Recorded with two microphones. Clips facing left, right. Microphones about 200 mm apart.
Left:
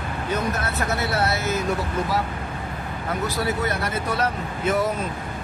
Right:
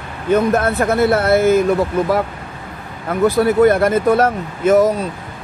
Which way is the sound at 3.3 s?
55° right (ahead or behind).